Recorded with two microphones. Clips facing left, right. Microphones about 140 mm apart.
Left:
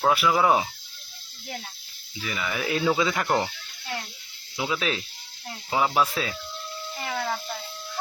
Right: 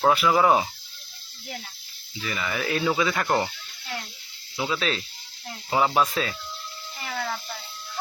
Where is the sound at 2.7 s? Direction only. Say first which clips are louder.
Left 1 dB; 15° left (ahead or behind).